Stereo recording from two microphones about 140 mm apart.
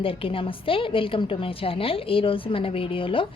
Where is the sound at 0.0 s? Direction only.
40° left (ahead or behind).